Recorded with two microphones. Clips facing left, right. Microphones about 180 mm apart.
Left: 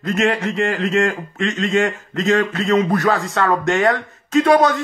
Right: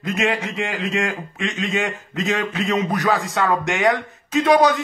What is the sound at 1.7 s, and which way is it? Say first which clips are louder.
Speech: left 5 dB; 20° right (ahead or behind).